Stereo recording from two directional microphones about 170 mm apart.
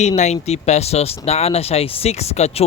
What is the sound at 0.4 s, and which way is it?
A man's voice, 40° left (ahead or behind).